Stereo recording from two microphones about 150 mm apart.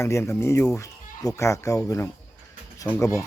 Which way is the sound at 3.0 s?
20° left (ahead or behind).